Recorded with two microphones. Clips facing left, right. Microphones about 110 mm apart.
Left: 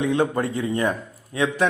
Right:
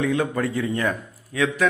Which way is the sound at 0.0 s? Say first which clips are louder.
Left 1 dB; 25° left (ahead or behind).